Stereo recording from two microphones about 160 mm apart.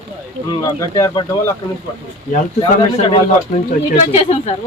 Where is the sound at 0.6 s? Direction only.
25° left (ahead or behind).